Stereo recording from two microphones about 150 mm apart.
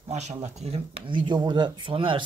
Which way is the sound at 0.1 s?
50° right (ahead or behind).